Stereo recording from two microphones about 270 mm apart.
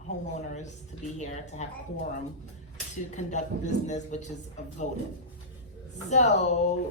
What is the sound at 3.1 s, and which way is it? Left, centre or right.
Speech, left.